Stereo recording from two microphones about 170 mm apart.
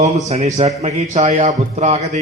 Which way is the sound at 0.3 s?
40° right (ahead or behind).